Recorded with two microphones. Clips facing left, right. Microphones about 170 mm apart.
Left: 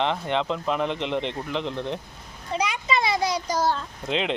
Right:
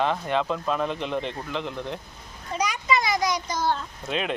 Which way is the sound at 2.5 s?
25° left (ahead or behind).